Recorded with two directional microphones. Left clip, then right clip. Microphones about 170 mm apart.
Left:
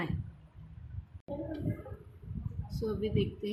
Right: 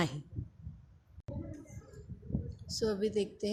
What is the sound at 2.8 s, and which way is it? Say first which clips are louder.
Speech: right 2 dB; 35° right (ahead or behind).